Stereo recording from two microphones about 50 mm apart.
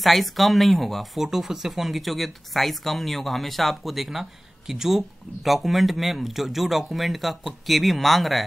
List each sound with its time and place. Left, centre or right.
0.0 s speech: centre